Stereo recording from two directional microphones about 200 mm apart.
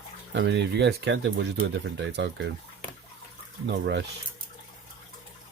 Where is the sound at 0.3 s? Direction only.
60° right (ahead or behind).